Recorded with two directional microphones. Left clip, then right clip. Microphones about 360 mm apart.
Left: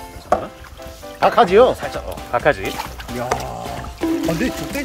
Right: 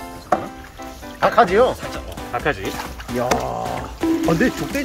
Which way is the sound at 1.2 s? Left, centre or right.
Left.